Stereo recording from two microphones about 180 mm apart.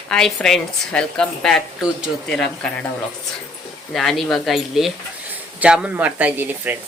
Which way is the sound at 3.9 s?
Centre (ahead or behind).